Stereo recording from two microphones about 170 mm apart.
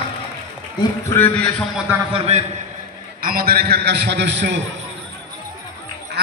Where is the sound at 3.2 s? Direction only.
60° right (ahead or behind); by 4.6 s 90° right.